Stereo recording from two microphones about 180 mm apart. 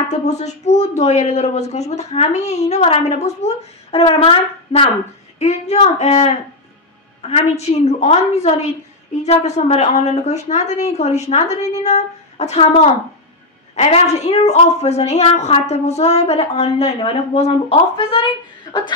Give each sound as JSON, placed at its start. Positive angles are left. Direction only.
{"t": 0.1, "sound": "a woman's voice", "side_deg": 40}
{"t": 18.7, "sound": "chuckle", "side_deg": 20}